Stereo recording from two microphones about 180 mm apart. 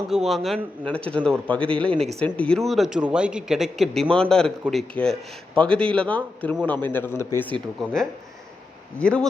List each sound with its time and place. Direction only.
0.1 s a man's voice: centre (ahead or behind)
1.9 s speech: 35° right (ahead or behind)
2.1 s a man's voice: 5° left (ahead or behind)
7.8 s a man's voice: centre (ahead or behind)
9.0 s a man's voice: 5° left (ahead or behind)